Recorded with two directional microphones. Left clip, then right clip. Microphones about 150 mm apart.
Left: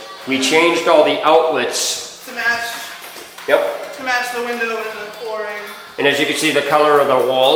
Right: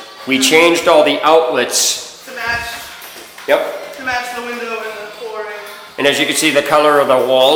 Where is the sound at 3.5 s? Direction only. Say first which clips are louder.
Right 1 dB; 40° right (ahead or behind).